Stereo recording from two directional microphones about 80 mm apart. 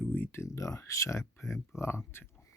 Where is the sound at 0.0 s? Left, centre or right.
Centre.